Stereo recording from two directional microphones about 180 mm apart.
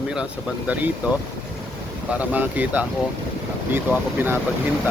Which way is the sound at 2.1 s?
10° right (ahead or behind).